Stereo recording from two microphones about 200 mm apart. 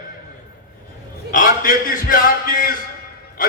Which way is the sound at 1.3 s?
45° left (ahead or behind).